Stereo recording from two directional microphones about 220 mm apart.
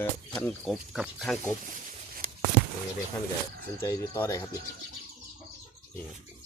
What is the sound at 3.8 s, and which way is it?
Speech, 10° left (ahead or behind).